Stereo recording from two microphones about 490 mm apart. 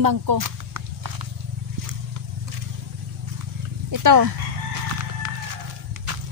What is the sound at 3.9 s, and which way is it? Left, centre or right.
Speech, right.